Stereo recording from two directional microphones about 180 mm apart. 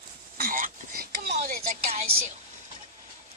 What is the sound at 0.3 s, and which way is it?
Whispering, 55° right (ahead or behind).